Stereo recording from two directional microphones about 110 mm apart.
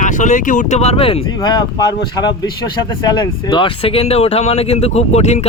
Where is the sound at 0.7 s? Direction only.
75° left (ahead or behind).